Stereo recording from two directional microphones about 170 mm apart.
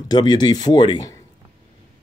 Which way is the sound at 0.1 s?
25° left (ahead or behind).